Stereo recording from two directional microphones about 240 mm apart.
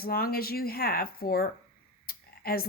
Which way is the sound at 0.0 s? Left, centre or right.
Left.